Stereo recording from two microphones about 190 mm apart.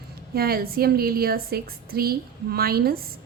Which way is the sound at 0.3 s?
50° right (ahead or behind).